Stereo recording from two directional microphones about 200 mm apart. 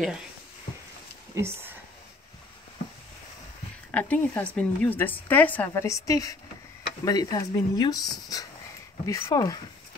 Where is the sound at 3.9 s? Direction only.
5° left (ahead or behind).